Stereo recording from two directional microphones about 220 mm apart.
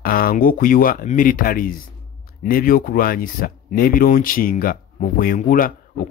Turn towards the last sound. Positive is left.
turn(degrees=40)  # may be behind; listen again after turning